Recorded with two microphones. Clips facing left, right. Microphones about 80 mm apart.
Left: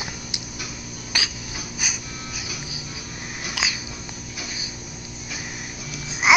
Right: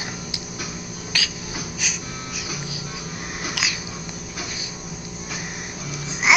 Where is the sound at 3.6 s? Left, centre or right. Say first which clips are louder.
Left 1 dB; centre.